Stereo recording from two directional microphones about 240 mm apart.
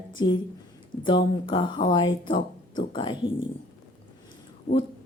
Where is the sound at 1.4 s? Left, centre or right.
Centre.